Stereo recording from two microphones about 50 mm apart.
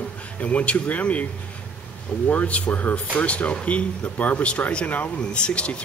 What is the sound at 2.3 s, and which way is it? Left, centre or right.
Speech, left.